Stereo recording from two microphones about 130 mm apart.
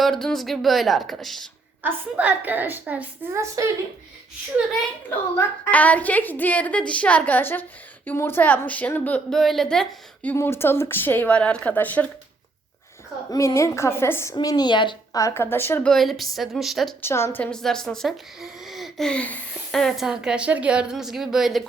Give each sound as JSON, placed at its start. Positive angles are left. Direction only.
{"t": 0.0, "sound": "speech", "side_deg": 0}
{"t": 1.8, "sound": "a woman's voice", "side_deg": -15}
{"t": 3.4, "sound": "speech", "side_deg": -25}
{"t": 5.0, "sound": "a woman's voice", "side_deg": 15}
{"t": 10.2, "sound": "a woman's voice", "side_deg": 15}
{"t": 13.3, "sound": "a woman's voice", "side_deg": 25}
{"t": 14.3, "sound": "a woman's voice", "side_deg": 30}
{"t": 15.2, "sound": "a woman's voice", "side_deg": 20}
{"t": 15.9, "sound": "speech", "side_deg": 0}
{"t": 17.0, "sound": "speech", "side_deg": 20}